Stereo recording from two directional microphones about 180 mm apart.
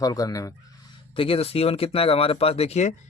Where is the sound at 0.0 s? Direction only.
20° left (ahead or behind).